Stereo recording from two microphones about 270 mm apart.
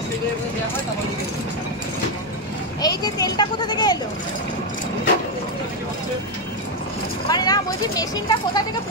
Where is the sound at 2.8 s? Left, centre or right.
Centre.